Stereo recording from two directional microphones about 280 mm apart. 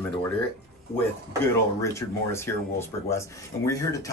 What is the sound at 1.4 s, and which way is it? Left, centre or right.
Speech, centre.